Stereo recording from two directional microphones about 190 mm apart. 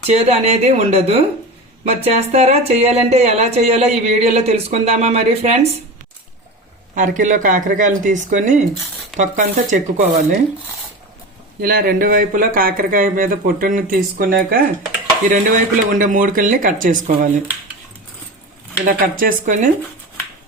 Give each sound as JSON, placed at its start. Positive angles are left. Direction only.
{"t": 0.0, "sound": "speech", "side_deg": -35}
{"t": 6.9, "sound": "speech", "side_deg": -40}
{"t": 11.6, "sound": "speech", "side_deg": -50}
{"t": 18.9, "sound": "speech", "side_deg": -45}